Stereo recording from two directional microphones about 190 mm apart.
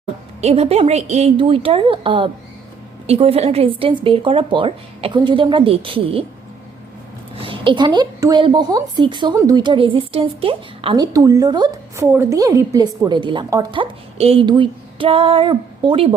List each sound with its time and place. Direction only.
0.4 s a woman's voice: 35° right (ahead or behind)
7.3 s a woman's voice: 25° right (ahead or behind)